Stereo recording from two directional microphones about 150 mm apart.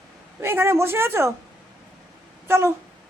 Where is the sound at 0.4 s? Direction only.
15° right (ahead or behind).